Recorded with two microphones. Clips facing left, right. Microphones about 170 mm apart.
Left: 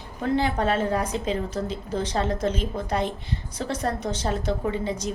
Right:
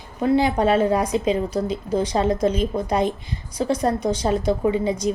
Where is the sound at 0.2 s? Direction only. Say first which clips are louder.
Right 5 dB; 15° right (ahead or behind).